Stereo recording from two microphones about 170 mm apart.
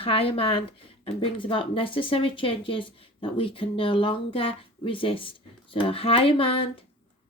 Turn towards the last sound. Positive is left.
turn(degrees=35)  # may be behind; listen again after turning